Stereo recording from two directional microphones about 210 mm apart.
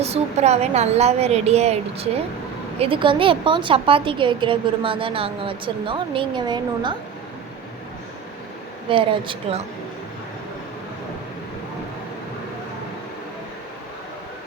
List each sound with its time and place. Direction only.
0.0 s a woman's voice: 30° right (ahead or behind)
8.9 s a woman's voice: 25° right (ahead or behind)